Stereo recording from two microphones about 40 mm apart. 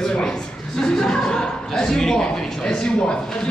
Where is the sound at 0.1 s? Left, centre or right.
Centre.